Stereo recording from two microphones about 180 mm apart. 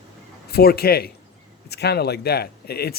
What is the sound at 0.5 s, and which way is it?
Speech, 60° left (ahead or behind).